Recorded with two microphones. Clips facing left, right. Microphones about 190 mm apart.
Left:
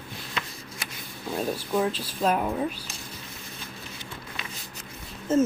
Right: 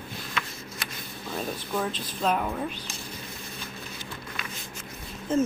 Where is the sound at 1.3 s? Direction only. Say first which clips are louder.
Left 4 dB; 10° left (ahead or behind).